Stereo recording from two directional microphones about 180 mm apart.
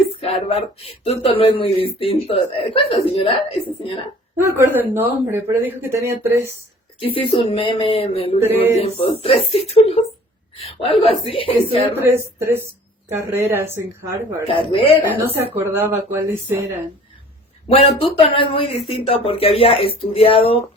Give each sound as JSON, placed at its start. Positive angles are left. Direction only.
{"t": 0.2, "sound": "speech", "side_deg": 35}
{"t": 4.4, "sound": "speech", "side_deg": -15}
{"t": 7.0, "sound": "speech", "side_deg": 30}
{"t": 10.8, "sound": "speech", "side_deg": 35}
{"t": 11.9, "sound": "speech", "side_deg": -15}
{"t": 14.4, "sound": "speech", "side_deg": 30}
{"t": 15.5, "sound": "speech", "side_deg": -10}
{"t": 17.7, "sound": "speech", "side_deg": 35}